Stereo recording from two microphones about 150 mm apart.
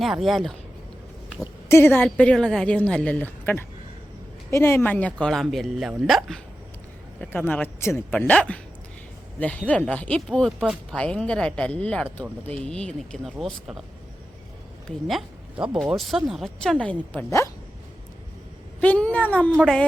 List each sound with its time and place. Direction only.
0.0 s speech: centre (ahead or behind)
1.7 s speech: 15° left (ahead or behind)
14.8 s speech: centre (ahead or behind)
17.2 s speech: 20° left (ahead or behind)
18.8 s speech: 10° left (ahead or behind)